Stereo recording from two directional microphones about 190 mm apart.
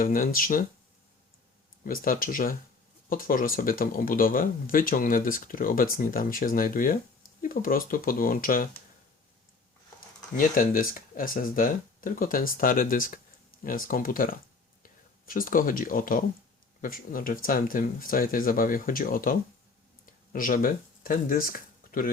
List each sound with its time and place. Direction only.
0.0 s speech: 45° left (ahead or behind)
1.8 s speech: 50° left (ahead or behind)
10.3 s speech: 45° left (ahead or behind)
15.3 s speech: 45° left (ahead or behind)